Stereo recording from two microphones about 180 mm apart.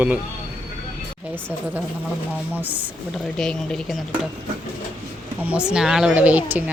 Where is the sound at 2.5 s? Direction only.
10° right (ahead or behind).